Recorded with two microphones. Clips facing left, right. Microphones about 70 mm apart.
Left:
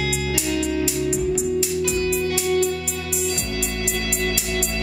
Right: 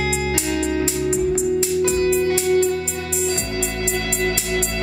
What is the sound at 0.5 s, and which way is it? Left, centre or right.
Music, right.